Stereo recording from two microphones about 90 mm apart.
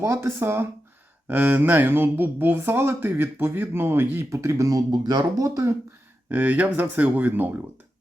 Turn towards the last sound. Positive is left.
turn(degrees=-20)  # may be behind; listen again after turning